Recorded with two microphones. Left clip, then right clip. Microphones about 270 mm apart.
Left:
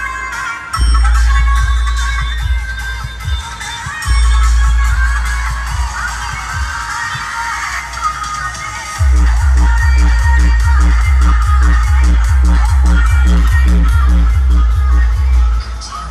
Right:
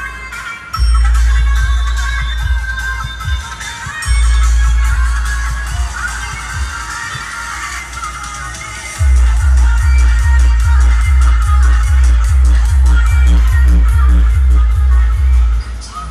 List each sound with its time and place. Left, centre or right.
1.0 s music: left
4.8 s music: left
9.8 s music: left